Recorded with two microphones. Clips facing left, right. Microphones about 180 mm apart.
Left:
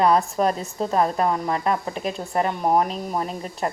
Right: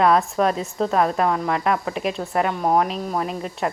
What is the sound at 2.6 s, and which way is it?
Speech, 5° left (ahead or behind).